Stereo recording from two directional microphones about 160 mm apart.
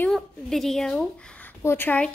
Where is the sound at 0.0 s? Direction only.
Centre (ahead or behind).